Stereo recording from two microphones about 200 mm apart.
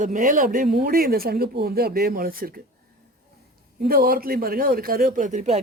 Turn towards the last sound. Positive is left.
turn(degrees=-35)  # may be behind; listen again after turning